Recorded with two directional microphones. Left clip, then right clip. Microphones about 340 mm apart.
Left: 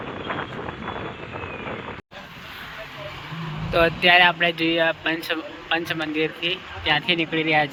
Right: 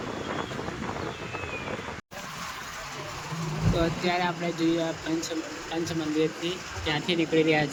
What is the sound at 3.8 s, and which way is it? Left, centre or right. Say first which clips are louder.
Speech: left 12 dB; centre.